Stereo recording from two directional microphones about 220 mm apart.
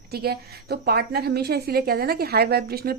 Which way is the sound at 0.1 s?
45° right (ahead or behind).